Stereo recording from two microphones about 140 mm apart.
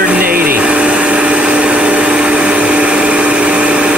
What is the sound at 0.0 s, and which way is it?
Vacuum cleaner, 10° right (ahead or behind).